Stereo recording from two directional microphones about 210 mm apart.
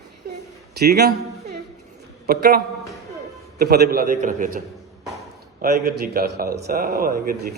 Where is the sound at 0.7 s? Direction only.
50° right (ahead or behind).